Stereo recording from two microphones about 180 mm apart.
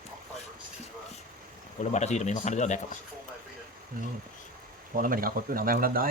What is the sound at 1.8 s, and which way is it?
Speech, 40° left (ahead or behind).